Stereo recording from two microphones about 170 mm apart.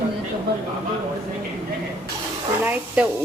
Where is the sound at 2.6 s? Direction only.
10° right (ahead or behind).